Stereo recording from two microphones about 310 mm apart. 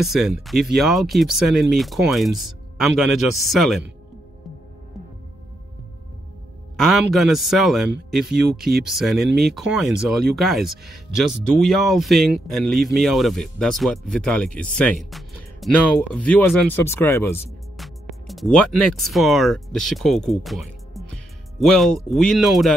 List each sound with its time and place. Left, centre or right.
0.0 s speech: centre
6.8 s speech: centre